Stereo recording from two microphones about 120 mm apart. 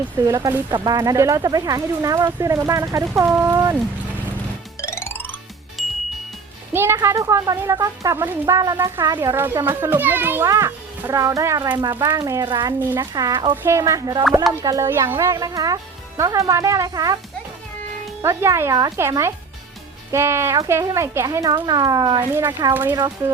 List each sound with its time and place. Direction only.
0.3 s a child's voice: 30° right (ahead or behind)
4.8 s music: 20° left (ahead or behind)
5.8 s ding: centre (ahead or behind)
6.7 s a child's voice: 20° right (ahead or behind)
8.2 s speech: 15° right (ahead or behind)
8.5 s a child's voice: 30° right (ahead or behind)
9.3 s a child's voice: 20° right (ahead or behind); by 13.6 s 40° right (ahead or behind)
13.6 s a child's voice: 25° right (ahead or behind)
14.8 s a child's voice: 20° right (ahead or behind)
18.2 s a child's voice: 20° right (ahead or behind)
22.7 s speech: 15° right (ahead or behind)